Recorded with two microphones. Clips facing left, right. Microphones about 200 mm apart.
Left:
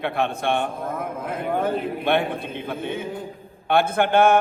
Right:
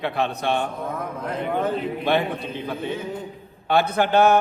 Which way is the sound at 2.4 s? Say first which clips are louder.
Right 1 dB; 55° left (ahead or behind).